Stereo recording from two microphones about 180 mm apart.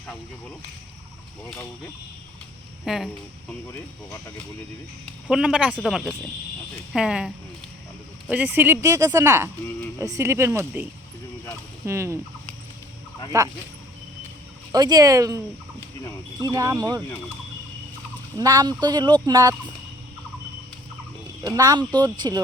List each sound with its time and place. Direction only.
2.8 s speech: centre (ahead or behind)
5.3 s speech: 5° right (ahead or behind)
11.9 s speech: 15° right (ahead or behind)
13.3 s speech: 15° right (ahead or behind)
14.7 s speech: 20° right (ahead or behind)
16.4 s speech: 20° right (ahead or behind)
18.3 s speech: 20° right (ahead or behind)
21.4 s speech: 20° right (ahead or behind)